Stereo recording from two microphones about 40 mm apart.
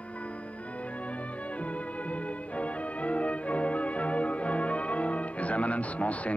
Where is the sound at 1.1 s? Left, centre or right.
Left.